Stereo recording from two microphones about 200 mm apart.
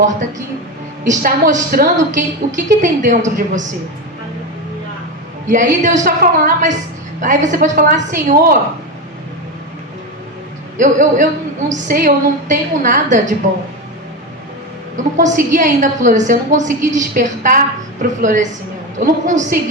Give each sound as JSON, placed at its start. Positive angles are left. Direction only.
{"t": 1.0, "sound": "a woman's voice", "side_deg": -40}
{"t": 5.5, "sound": "a woman's voice", "side_deg": -40}
{"t": 10.8, "sound": "a woman's voice", "side_deg": -40}
{"t": 14.9, "sound": "a woman's voice", "side_deg": -40}